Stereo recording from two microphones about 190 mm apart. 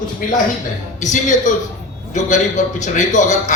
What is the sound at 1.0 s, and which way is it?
Speech, 40° left (ahead or behind).